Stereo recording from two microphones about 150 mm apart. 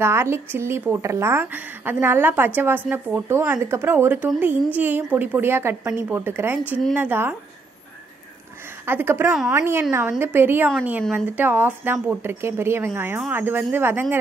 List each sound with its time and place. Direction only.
0.0 s speech: 15° right (ahead or behind)
8.8 s speech: 15° right (ahead or behind)